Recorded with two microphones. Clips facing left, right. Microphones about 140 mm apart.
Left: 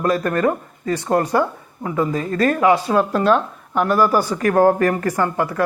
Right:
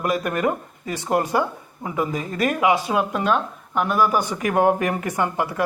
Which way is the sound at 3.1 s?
5° right (ahead or behind).